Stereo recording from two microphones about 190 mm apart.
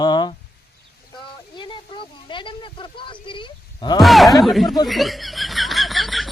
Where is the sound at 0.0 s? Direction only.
20° left (ahead or behind).